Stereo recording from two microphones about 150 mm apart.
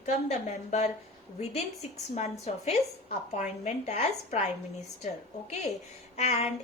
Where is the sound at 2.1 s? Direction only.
45° left (ahead or behind).